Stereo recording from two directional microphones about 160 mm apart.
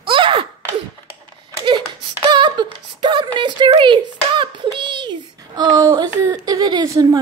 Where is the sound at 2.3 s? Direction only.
30° right (ahead or behind).